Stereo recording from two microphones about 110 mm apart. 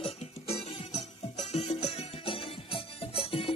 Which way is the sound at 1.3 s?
75° left (ahead or behind).